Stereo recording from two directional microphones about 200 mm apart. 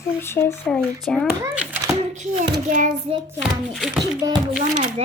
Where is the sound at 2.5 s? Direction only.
40° right (ahead or behind).